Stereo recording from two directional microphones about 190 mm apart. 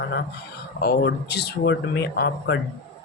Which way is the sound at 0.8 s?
60° left (ahead or behind).